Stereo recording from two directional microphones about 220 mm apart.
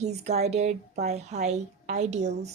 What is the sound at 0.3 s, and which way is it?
A woman's voice, 30° right (ahead or behind).